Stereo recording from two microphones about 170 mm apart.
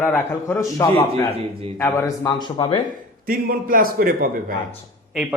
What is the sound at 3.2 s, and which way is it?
A man's voice, 60° right (ahead or behind).